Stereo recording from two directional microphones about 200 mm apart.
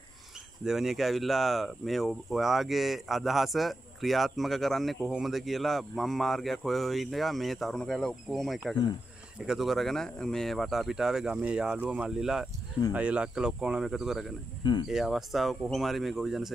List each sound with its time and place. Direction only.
0.7 s speech: centre (ahead or behind)
14.6 s speech: 20° left (ahead or behind)
14.9 s speech: centre (ahead or behind)